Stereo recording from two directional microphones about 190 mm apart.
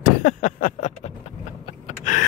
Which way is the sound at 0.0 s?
45° left (ahead or behind).